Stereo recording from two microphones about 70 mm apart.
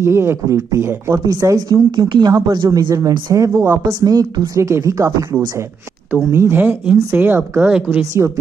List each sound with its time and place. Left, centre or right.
0.0 s speech: right
0.6 s speech: right
4.0 s a woman's voice: right
4.6 s speech: right
6.3 s speech: right